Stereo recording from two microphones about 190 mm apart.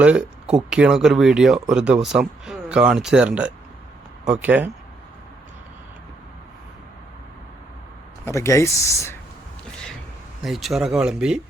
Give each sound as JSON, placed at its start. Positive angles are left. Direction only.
{"t": 0.0, "sound": "speech", "side_deg": -5}
{"t": 8.2, "sound": "speech", "side_deg": 15}
{"t": 10.4, "sound": "speech", "side_deg": 0}